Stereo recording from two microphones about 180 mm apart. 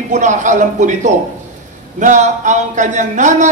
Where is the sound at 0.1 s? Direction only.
40° right (ahead or behind).